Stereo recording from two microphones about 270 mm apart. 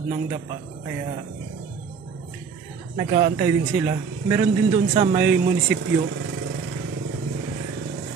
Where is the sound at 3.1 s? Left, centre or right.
Right.